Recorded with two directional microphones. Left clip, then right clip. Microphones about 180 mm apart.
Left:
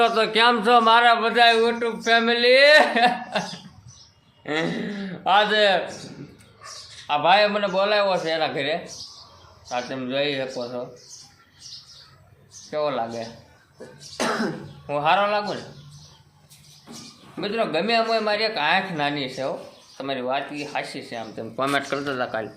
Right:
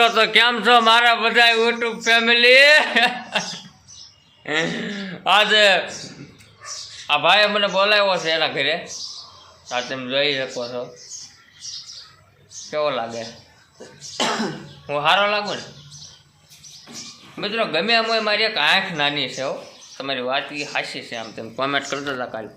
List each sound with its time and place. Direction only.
0.0 s a man's voice: 5° left (ahead or behind)
4.4 s a man's voice: 5° right (ahead or behind)
7.1 s a man's voice: 10° right (ahead or behind)
12.7 s a man's voice: 10° right (ahead or behind)
13.7 s cough: 35° right (ahead or behind)
14.8 s a man's voice: 10° right (ahead or behind)
17.4 s a man's voice: 5° right (ahead or behind); by 22.4 s 10° left (ahead or behind)